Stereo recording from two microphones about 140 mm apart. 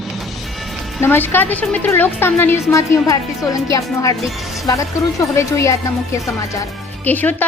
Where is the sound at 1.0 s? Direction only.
15° left (ahead or behind).